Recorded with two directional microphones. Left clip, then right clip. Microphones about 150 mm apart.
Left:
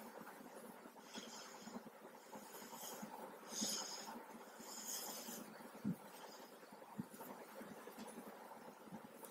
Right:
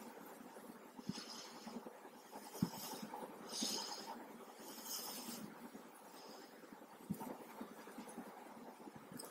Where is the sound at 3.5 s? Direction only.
35° right (ahead or behind).